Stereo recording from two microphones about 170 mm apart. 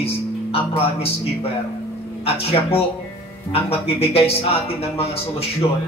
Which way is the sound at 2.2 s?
35° left (ahead or behind).